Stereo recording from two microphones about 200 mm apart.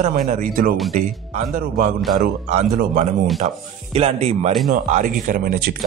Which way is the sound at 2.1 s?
40° right (ahead or behind).